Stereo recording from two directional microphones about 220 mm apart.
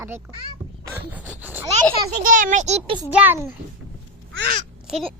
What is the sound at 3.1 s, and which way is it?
Speech, 5° right (ahead or behind).